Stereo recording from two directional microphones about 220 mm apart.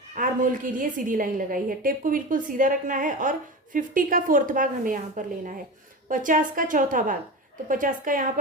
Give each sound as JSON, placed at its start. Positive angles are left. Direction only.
{"t": 0.2, "sound": "a woman's voice", "side_deg": -40}